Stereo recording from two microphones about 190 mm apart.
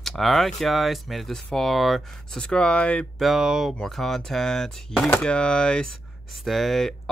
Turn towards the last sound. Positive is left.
turn(degrees=0)  # may be behind; listen again after turning